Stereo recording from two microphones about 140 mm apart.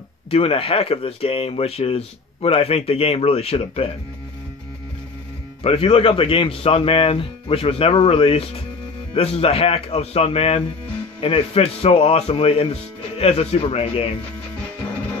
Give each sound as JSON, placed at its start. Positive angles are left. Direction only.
{"t": 0.3, "sound": "speech", "side_deg": 45}
{"t": 5.6, "sound": "a man's voice", "side_deg": 45}